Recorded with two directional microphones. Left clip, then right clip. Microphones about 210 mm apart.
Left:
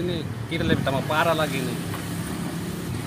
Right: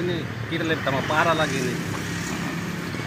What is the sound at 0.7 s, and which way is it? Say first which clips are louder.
Speech: right 1 dB; 25° left (ahead or behind).